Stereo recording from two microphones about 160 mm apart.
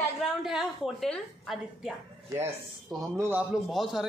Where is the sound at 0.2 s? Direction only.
Centre (ahead or behind).